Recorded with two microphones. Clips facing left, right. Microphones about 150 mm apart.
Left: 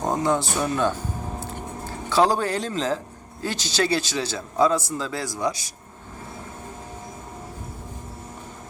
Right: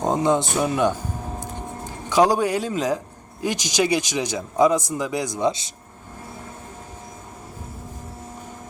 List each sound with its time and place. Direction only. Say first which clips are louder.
0.0 s a man's voice: right 3 dB; 20° right (ahead or behind)